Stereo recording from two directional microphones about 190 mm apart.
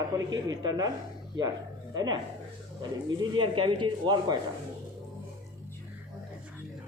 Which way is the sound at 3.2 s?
25° right (ahead or behind).